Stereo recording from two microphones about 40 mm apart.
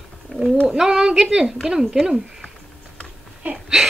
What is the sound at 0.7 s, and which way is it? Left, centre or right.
Speech, centre.